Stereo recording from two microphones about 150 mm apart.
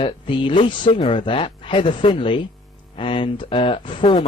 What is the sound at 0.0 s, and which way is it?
Speech, 35° left (ahead or behind).